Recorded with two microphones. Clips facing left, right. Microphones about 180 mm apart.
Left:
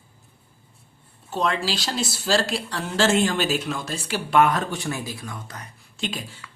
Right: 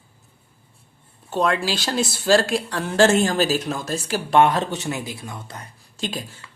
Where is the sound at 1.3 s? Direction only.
55° right (ahead or behind).